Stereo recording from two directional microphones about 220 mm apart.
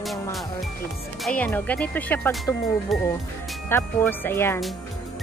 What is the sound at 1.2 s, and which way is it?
Speech, 5° left (ahead or behind).